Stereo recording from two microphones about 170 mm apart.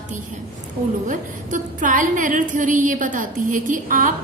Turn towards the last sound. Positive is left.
turn(degrees=-50)  # may be behind; listen again after turning